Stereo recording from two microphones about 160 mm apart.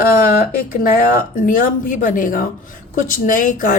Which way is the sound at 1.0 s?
60° left (ahead or behind).